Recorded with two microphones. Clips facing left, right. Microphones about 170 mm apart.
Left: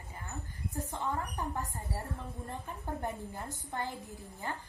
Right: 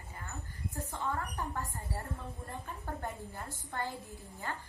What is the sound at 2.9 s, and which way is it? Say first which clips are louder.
A woman's voice: left 4 dB; 15° left (ahead or behind).